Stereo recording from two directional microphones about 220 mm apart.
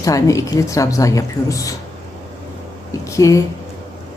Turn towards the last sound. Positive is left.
turn(degrees=15)  # may be behind; listen again after turning